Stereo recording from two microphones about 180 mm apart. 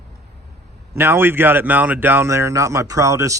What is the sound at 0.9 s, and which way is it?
Speech, 15° right (ahead or behind).